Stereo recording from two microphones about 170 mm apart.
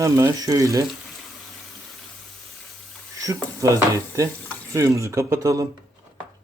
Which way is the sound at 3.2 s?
20° right (ahead or behind).